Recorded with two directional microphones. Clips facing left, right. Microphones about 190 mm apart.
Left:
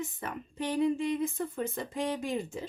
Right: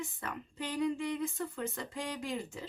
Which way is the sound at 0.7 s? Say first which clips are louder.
Left 5 dB; 25° left (ahead or behind).